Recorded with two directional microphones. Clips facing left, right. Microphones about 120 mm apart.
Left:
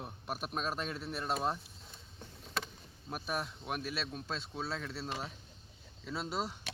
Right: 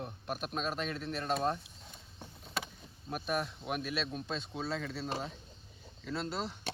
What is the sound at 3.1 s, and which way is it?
Speech, centre (ahead or behind).